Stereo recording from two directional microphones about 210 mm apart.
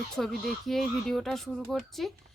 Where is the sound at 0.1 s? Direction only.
Centre (ahead or behind).